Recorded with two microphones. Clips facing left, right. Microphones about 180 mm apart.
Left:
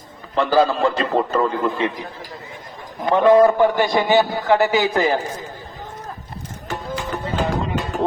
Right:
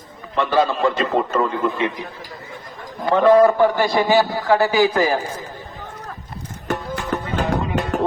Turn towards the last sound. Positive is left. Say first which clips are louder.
# right 2 dB
turn(degrees=-65)  # may be behind; listen again after turning